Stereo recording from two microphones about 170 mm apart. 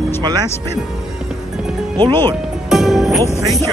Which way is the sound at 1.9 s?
25° right (ahead or behind).